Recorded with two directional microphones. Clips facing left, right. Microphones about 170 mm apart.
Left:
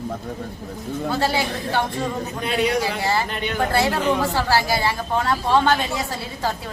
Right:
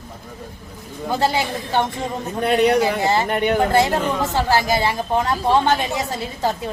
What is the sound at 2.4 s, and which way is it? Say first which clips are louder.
A man's voice: right 6 dB; 60° right (ahead or behind).